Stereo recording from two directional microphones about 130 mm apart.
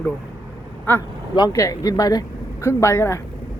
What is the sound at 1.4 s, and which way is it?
Speech, 25° left (ahead or behind).